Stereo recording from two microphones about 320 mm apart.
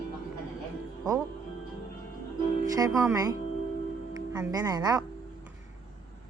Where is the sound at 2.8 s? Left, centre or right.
Centre.